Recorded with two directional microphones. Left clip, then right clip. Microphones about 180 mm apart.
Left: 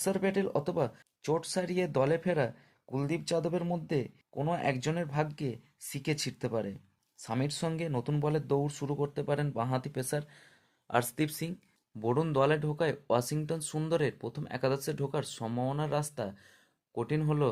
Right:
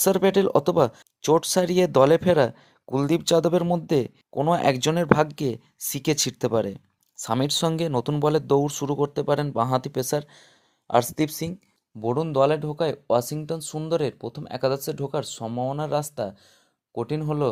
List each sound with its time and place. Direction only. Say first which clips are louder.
0.0 s speech: right 11 dB; 50° right (ahead or behind); by 17.5 s 25° right (ahead or behind)